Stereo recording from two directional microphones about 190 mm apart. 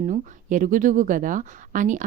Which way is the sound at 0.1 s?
40° right (ahead or behind).